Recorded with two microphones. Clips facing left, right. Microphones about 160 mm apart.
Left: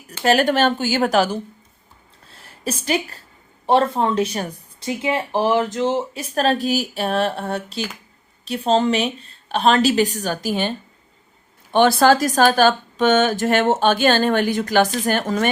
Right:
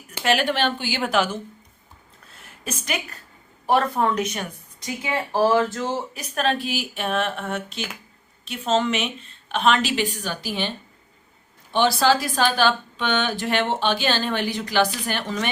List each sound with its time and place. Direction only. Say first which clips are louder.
0.2 s a woman's voice: left 5 dB; 45° left (ahead or behind)
2.2 s a sound: left 7 dB; 35° left (ahead or behind)
3.7 s a woman's voice: left 3 dB; 25° left (ahead or behind)
6.3 s a woman's voice: left 5 dB; 35° left (ahead or behind)
11.7 s a woman's voice: left 5 dB; 50° left (ahead or behind)